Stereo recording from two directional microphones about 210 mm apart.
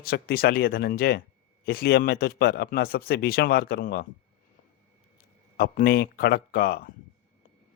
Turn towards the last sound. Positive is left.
turn(degrees=50)  # may be behind; listen again after turning